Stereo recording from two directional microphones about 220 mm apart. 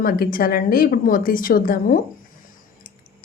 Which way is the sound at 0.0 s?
40° left (ahead or behind).